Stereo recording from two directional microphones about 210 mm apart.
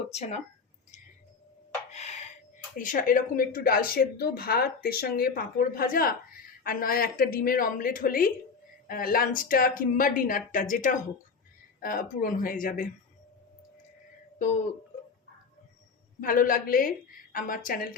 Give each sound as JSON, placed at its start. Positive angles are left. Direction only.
{"t": 0.1, "sound": "speech", "side_deg": 30}
{"t": 1.9, "sound": "a sound", "side_deg": 35}
{"t": 2.7, "sound": "speech", "side_deg": 40}
{"t": 14.3, "sound": "speech", "side_deg": 35}
{"t": 16.2, "sound": "speech", "side_deg": 40}